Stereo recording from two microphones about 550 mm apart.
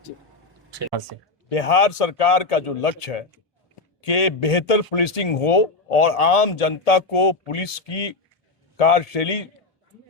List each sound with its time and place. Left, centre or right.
0.8 s speech: right
1.5 s a man's voice: left